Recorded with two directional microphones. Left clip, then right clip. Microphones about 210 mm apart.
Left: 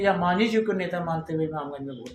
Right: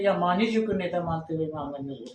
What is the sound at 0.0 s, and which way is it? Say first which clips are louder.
Speech: left 1 dB; 55° left (ahead or behind).